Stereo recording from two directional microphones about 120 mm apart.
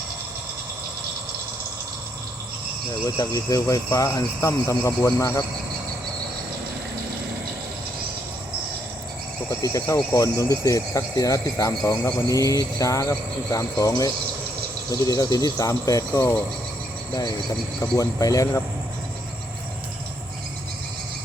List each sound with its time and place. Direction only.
3.0 s speech: 30° left (ahead or behind)
9.5 s speech: 25° left (ahead or behind)
17.7 s speech: 30° left (ahead or behind)